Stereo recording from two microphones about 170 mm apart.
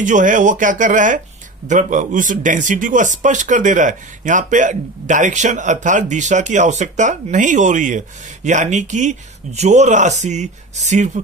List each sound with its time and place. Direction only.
0.0 s speech: 50° right (ahead or behind)